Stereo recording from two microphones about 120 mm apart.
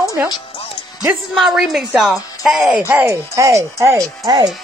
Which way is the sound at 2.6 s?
15° right (ahead or behind).